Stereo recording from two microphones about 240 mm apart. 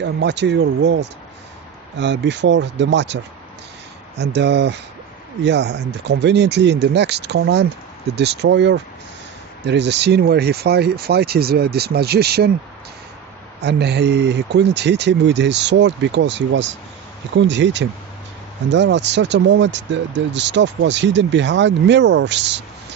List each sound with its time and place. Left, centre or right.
0.0 s speech: right
4.2 s speech: right
13.6 s speech: right